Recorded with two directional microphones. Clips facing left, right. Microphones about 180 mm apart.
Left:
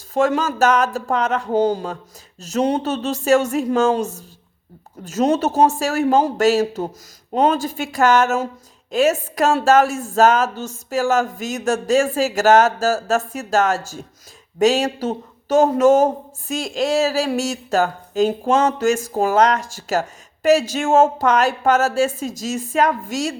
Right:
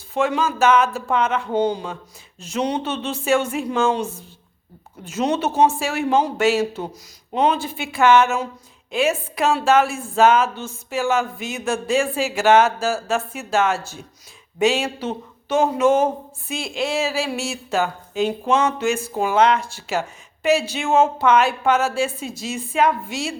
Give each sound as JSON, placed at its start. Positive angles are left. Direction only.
{"t": 0.1, "sound": "speech", "side_deg": 40}